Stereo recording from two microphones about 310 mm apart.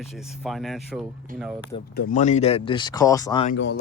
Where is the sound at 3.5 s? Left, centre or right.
Left.